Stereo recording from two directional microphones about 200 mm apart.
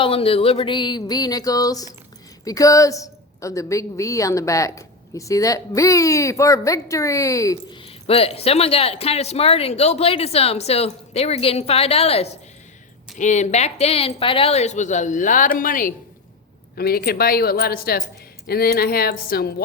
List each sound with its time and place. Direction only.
0.0 s a woman's voice: 30° left (ahead or behind)
7.9 s a woman's voice: 30° left (ahead or behind); by 19.6 s 50° left (ahead or behind)